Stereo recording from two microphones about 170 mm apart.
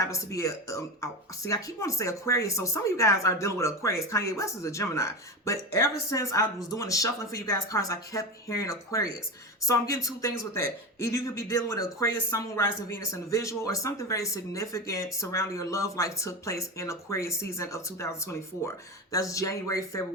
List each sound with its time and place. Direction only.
0.0 s speech: 20° left (ahead or behind)